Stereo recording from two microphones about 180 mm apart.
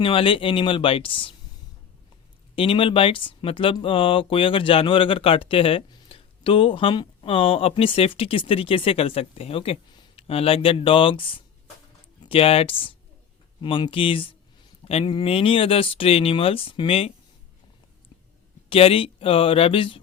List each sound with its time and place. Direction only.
0.0 s speech: 30° left (ahead or behind)
2.6 s speech: 30° left (ahead or behind)
18.7 s speech: 30° left (ahead or behind)